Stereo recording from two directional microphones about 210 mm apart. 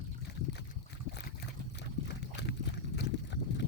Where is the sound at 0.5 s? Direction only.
55° left (ahead or behind).